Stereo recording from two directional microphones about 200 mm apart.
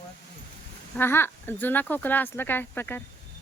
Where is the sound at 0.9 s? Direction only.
10° left (ahead or behind).